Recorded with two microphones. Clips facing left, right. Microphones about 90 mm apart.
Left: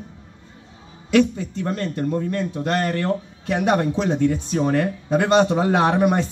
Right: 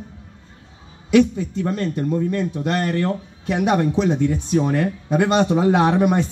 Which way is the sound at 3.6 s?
30° left (ahead or behind).